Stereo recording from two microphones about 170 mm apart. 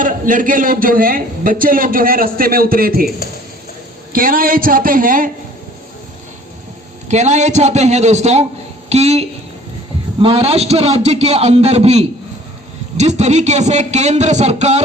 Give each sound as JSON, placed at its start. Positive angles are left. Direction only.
{"t": 0.0, "sound": "a man's voice", "side_deg": -55}
{"t": 4.1, "sound": "a man's voice", "side_deg": -60}
{"t": 7.1, "sound": "a man's voice", "side_deg": -45}